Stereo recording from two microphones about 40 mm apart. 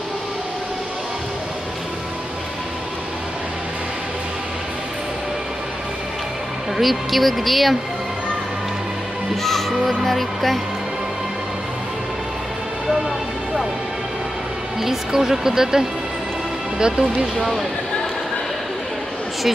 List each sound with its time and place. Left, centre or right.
6.8 s speech: centre
9.4 s speech: centre
14.8 s speech: centre
17.4 s speech: centre